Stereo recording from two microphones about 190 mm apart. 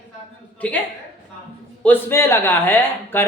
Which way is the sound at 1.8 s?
10° left (ahead or behind).